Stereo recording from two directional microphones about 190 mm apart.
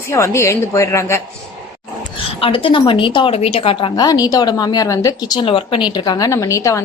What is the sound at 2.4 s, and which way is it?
A woman's voice, 30° left (ahead or behind).